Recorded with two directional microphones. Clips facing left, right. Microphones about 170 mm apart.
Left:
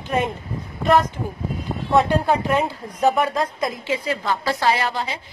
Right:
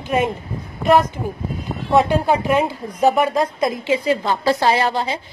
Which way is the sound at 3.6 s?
25° right (ahead or behind).